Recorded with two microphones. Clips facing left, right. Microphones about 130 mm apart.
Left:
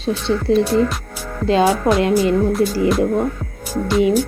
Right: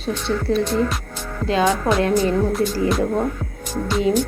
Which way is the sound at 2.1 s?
10° left (ahead or behind).